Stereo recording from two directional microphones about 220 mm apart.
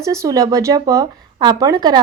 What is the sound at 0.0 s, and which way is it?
A woman's voice, 15° right (ahead or behind).